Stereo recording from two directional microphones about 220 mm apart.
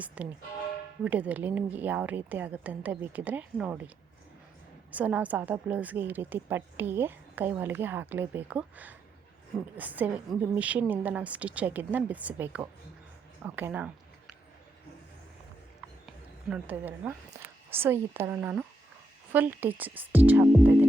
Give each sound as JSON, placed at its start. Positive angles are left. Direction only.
{"t": 0.2, "sound": "a woman's voice", "side_deg": -5}
{"t": 4.9, "sound": "a woman's voice", "side_deg": -5}
{"t": 16.0, "sound": "a woman's voice", "side_deg": -5}